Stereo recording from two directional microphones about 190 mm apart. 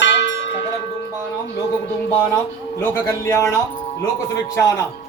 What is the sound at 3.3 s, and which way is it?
Speech, 15° left (ahead or behind).